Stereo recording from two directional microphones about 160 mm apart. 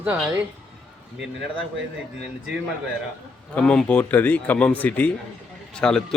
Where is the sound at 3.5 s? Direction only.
5° left (ahead or behind).